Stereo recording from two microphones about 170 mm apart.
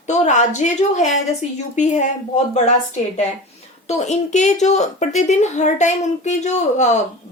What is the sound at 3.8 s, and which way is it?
Speech, 40° left (ahead or behind).